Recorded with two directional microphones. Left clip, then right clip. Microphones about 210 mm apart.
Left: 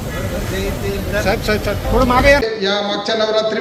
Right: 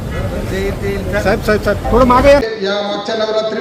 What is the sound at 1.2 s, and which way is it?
Speech, 40° right (ahead or behind).